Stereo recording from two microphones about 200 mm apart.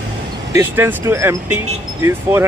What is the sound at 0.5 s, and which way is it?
Speech, 10° right (ahead or behind).